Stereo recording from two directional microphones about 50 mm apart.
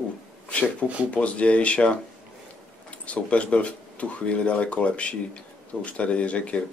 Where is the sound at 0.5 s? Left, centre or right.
Left.